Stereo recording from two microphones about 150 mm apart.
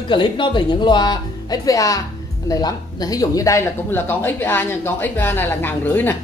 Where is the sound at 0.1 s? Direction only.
30° left (ahead or behind).